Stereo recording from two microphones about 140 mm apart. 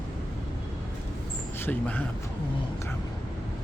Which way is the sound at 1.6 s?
10° left (ahead or behind).